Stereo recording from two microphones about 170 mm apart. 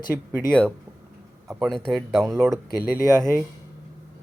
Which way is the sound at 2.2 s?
15° right (ahead or behind).